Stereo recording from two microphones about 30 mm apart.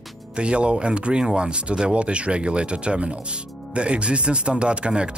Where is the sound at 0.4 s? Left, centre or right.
Right.